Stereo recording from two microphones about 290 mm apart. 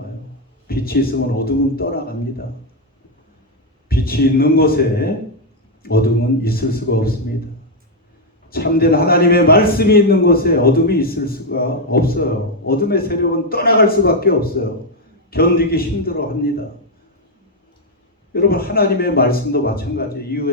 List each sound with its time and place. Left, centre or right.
0.7 s a sound: left
1.5 s a man's voice: left
3.8 s a man's voice: left
8.4 s a man's voice: left
18.3 s a man's voice: left